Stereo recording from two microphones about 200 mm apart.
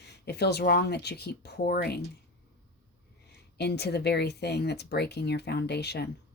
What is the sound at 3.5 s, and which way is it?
Speech, 55° left (ahead or behind).